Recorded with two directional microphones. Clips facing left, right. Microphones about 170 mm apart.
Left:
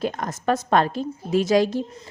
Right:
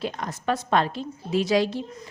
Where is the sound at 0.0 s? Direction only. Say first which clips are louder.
Left 4 dB; 45° left (ahead or behind).